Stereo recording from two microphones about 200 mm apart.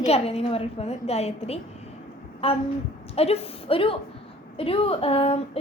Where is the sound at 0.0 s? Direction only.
30° left (ahead or behind).